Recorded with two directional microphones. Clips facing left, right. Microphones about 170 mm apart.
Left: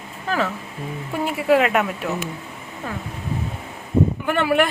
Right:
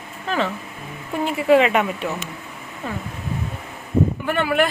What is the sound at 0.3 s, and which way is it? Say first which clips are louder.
Speech: even; 5° left (ahead or behind).